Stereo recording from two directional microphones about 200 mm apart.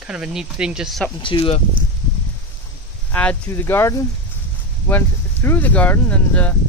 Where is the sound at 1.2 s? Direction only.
25° left (ahead or behind).